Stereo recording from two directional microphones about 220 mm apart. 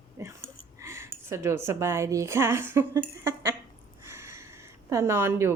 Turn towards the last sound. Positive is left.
turn(degrees=-10)  # may be behind; listen again after turning